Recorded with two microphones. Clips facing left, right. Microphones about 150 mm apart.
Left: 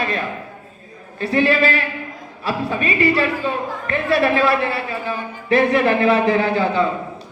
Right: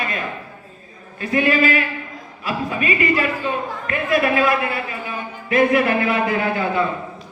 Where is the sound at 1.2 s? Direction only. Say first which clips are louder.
Left 1 dB; 30° left (ahead or behind).